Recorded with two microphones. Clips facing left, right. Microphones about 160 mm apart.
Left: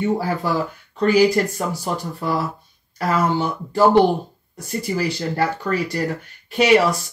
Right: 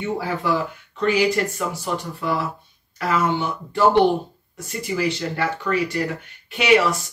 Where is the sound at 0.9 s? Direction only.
40° left (ahead or behind).